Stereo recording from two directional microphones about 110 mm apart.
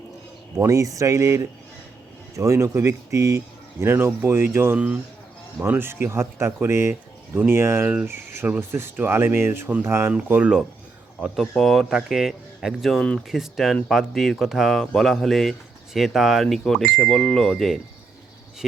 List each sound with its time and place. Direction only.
0.6 s speech: 30° right (ahead or behind); by 10.6 s 15° right (ahead or behind)
11.3 s speech: centre (ahead or behind)